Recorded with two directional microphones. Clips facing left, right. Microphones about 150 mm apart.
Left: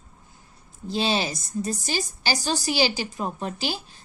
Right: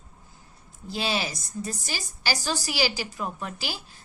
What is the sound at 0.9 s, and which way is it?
A woman's voice, 25° left (ahead or behind).